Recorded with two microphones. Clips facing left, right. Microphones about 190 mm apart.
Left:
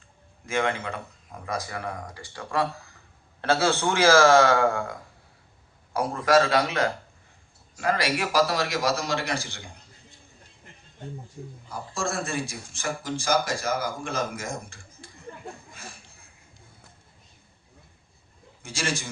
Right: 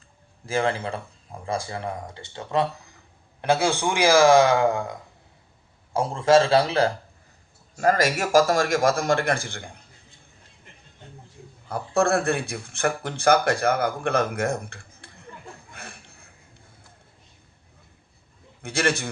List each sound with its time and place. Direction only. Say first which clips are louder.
0.4 s a man's voice: right 2 dB; 35° right (ahead or behind)
7.8 s a man's voice: right 4 dB; 45° right (ahead or behind)
11.7 s speech: right 10 dB; 60° right (ahead or behind)
15.7 s a sound: right 2 dB; 60° right (ahead or behind)
18.6 s speech: right 6 dB; 60° right (ahead or behind)